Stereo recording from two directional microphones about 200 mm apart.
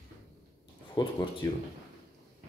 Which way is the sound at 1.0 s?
25° left (ahead or behind).